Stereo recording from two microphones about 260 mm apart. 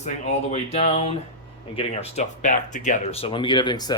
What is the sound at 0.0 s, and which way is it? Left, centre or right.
Speech, left.